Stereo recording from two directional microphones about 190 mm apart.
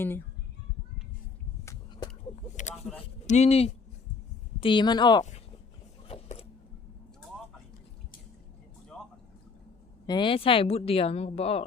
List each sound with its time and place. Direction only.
3.2 s speech: 35° left (ahead or behind)
6.1 s keys jangling: 30° left (ahead or behind)
10.1 s speech: 25° left (ahead or behind)